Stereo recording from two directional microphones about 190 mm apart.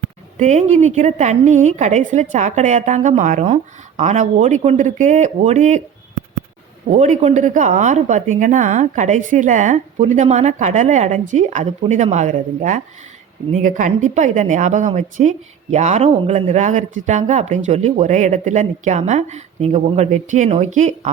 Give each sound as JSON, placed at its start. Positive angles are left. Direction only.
{"t": 0.3, "sound": "a woman's voice", "side_deg": -35}
{"t": 6.8, "sound": "a woman's voice", "side_deg": -40}